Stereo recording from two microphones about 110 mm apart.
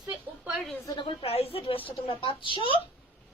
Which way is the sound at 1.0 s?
60° left (ahead or behind).